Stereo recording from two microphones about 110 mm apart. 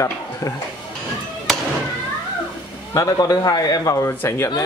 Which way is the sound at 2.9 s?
35° left (ahead or behind).